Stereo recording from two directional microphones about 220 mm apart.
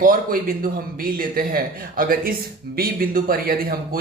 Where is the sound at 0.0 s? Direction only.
40° right (ahead or behind).